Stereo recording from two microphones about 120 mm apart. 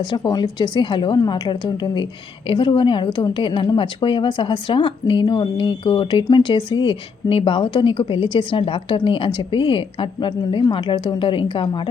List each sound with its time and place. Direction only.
0.2 s a woman's voice: 35° left (ahead or behind)